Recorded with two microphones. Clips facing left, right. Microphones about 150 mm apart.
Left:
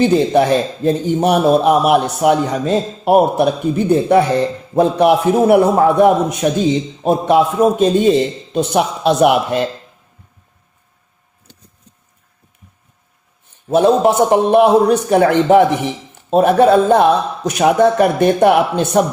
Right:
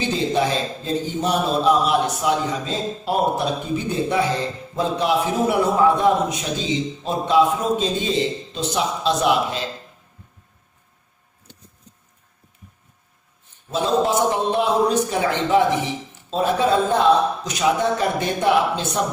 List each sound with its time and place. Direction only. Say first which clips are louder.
0.0 s a man's voice: left 9 dB; 60° left (ahead or behind)
13.7 s a man's voice: left 8 dB; 60° left (ahead or behind)